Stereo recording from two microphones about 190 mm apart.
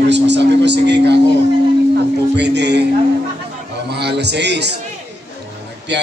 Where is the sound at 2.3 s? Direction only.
65° right (ahead or behind).